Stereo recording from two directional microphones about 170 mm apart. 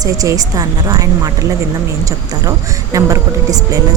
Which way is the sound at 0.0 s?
20° right (ahead or behind).